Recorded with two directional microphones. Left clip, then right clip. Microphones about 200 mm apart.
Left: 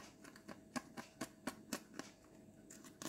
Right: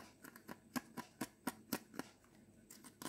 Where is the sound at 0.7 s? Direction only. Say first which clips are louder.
Right 1 dB; 5° right (ahead or behind).